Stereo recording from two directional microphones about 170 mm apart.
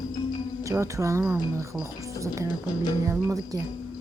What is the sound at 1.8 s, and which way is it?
A woman's voice, 20° right (ahead or behind).